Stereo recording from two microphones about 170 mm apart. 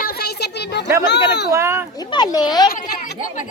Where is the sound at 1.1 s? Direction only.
80° left.